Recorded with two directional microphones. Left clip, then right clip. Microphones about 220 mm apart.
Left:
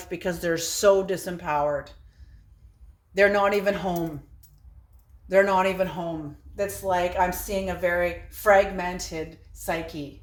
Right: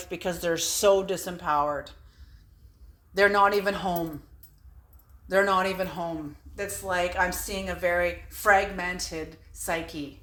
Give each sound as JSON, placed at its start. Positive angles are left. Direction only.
{"t": 0.0, "sound": "a woman's voice", "side_deg": -5}
{"t": 3.2, "sound": "a woman's voice", "side_deg": -10}
{"t": 5.3, "sound": "a woman's voice", "side_deg": -10}